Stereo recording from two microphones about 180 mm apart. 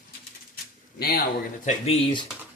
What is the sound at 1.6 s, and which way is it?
Speech, 45° left (ahead or behind).